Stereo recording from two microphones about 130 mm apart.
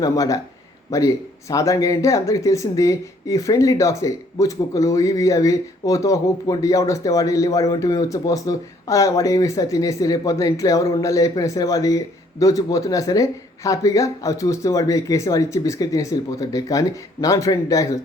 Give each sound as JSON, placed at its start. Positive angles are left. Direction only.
{"t": 0.0, "sound": "speech", "side_deg": 30}